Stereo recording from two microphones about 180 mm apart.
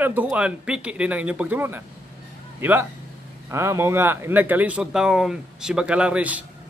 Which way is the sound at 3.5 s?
15° right (ahead or behind).